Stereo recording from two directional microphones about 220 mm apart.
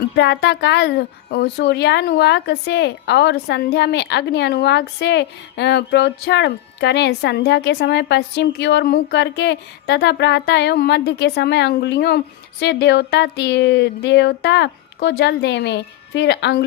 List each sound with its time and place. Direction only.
0.2 s a woman's voice: 50° left (ahead or behind)